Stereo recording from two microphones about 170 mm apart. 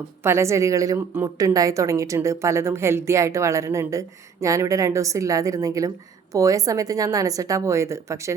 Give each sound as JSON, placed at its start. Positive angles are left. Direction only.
{"t": 0.2, "sound": "a woman's voice", "side_deg": -15}